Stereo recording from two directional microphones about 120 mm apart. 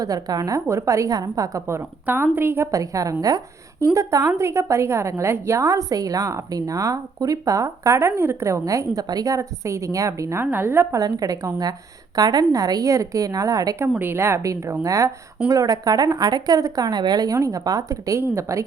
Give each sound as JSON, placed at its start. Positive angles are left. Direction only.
{"t": 0.0, "sound": "a woman's voice", "side_deg": -30}
{"t": 11.0, "sound": "a woman's voice", "side_deg": -30}